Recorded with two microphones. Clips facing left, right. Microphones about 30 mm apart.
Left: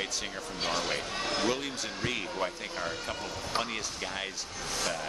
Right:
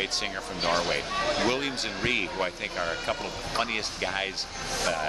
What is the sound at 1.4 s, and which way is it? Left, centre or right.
Speech, right.